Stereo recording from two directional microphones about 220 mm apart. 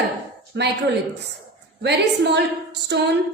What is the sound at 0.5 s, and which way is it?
Speech, 50° right (ahead or behind).